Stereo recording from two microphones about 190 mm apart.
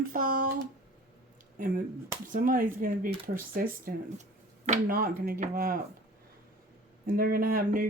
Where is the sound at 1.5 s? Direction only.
45° right (ahead or behind).